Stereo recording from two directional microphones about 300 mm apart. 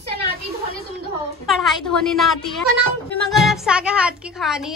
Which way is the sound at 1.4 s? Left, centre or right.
Centre.